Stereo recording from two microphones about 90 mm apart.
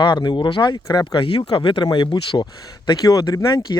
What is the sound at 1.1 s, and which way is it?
Speech, 70° left (ahead or behind).